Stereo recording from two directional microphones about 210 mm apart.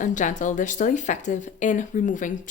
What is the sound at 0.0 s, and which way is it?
A woman's voice, 35° left (ahead or behind).